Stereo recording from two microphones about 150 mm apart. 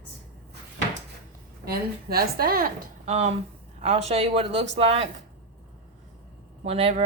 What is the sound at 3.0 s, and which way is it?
Speech, 45° right (ahead or behind).